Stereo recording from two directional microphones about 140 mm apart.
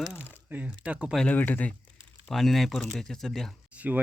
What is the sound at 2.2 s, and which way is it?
Speech, centre (ahead or behind).